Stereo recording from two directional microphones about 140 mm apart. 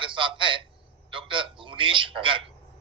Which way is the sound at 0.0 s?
35° right (ahead or behind).